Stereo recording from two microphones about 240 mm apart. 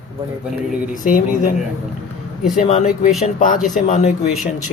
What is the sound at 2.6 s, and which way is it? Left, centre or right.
A woman's voice, left.